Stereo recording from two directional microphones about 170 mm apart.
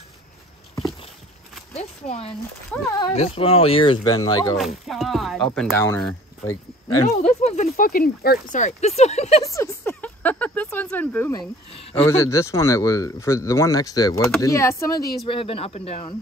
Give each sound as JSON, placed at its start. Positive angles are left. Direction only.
{"t": 1.7, "sound": "speech", "side_deg": 35}
{"t": 2.7, "sound": "speech", "side_deg": 10}
{"t": 3.2, "sound": "speech", "side_deg": 35}
{"t": 4.6, "sound": "speech", "side_deg": 0}
{"t": 5.7, "sound": "speech", "side_deg": 15}
{"t": 7.1, "sound": "speech", "side_deg": 40}
{"t": 7.7, "sound": "speech", "side_deg": 55}
{"t": 8.5, "sound": "speech", "side_deg": 40}
{"t": 9.5, "sound": "a sound", "side_deg": 15}
{"t": 11.9, "sound": "speech", "side_deg": 15}
{"t": 15.2, "sound": "speech", "side_deg": 30}